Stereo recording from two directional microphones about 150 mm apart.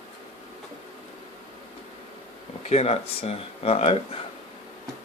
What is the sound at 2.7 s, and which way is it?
Speech, 45° left (ahead or behind).